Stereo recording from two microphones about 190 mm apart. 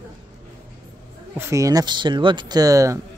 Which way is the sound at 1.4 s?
15° right (ahead or behind).